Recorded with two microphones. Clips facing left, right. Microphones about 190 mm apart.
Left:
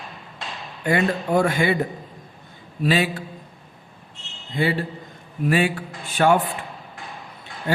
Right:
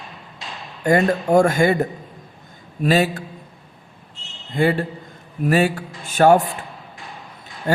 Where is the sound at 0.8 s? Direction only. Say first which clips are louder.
Right 4 dB; 45° right (ahead or behind).